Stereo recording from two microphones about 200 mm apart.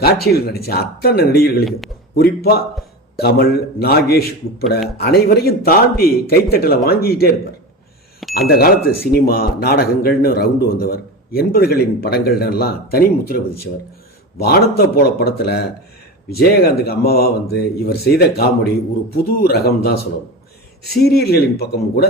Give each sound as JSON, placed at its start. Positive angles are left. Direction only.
{"t": 0.0, "sound": "speech", "side_deg": 50}
{"t": 8.2, "sound": "bicycle bell", "side_deg": 0}
{"t": 8.4, "sound": "speech", "side_deg": 50}
{"t": 20.9, "sound": "speech", "side_deg": 50}